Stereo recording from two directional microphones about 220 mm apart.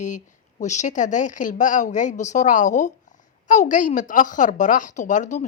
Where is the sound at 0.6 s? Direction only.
30° left (ahead or behind).